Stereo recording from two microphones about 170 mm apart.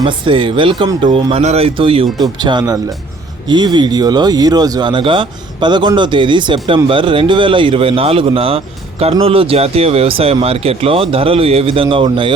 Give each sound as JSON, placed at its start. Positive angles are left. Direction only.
{"t": 0.0, "sound": "speech", "side_deg": -30}